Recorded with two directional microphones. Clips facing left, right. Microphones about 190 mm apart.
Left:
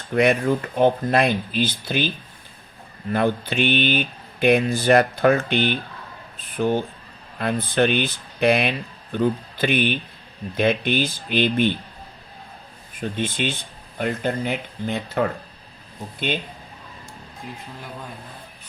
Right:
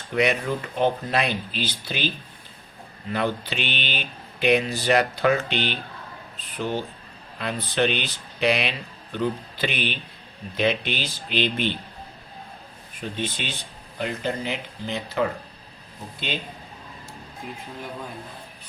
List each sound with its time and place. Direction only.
0.1 s speech: 50° left (ahead or behind)
3.1 s speech: 50° left (ahead or behind)
13.0 s speech: 50° left (ahead or behind)